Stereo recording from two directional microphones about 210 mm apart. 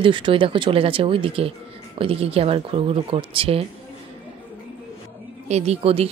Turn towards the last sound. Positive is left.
turn(degrees=-30)  # may be behind; listen again after turning